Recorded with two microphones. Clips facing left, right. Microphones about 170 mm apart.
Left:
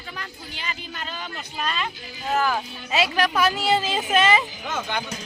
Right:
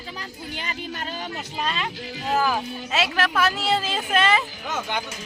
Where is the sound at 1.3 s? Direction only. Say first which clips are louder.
Left 1 dB; 25° right (ahead or behind).